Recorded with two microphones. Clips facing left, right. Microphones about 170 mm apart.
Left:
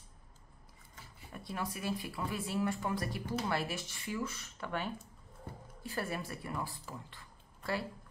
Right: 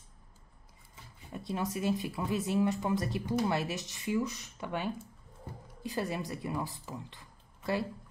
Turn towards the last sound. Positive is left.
turn(degrees=-20)  # may be behind; listen again after turning